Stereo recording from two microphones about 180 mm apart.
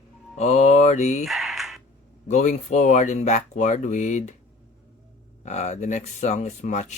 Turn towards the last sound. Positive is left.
turn(degrees=40)  # may be behind; listen again after turning